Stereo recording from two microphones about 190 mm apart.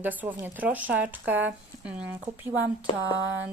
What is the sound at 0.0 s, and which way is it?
A woman's voice, 10° right (ahead or behind).